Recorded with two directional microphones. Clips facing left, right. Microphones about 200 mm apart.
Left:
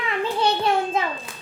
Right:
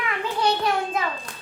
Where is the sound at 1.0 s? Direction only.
25° left (ahead or behind).